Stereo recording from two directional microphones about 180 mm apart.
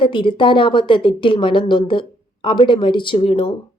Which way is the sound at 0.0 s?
30° left (ahead or behind).